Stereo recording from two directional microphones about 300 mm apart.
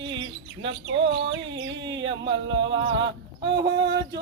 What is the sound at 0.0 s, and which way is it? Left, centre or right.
Chirp, right.